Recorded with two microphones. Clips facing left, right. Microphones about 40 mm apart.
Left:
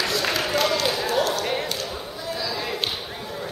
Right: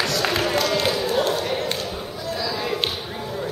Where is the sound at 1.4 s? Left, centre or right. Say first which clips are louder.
Right 1 dB; centre.